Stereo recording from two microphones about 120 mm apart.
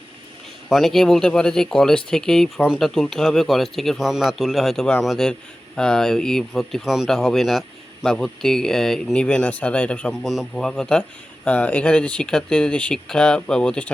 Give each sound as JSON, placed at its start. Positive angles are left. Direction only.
{"t": 0.7, "sound": "speech", "side_deg": 0}